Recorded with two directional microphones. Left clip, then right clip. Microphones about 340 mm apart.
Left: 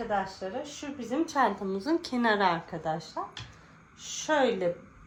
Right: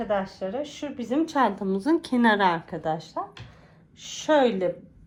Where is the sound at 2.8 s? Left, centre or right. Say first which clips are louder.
Right 4 dB; right.